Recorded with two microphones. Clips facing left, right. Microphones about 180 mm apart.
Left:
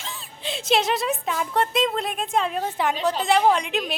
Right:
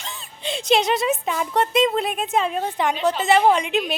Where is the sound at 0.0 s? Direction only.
Centre (ahead or behind).